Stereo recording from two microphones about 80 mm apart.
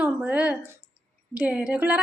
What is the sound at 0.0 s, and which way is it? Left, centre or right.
A woman's voice, centre.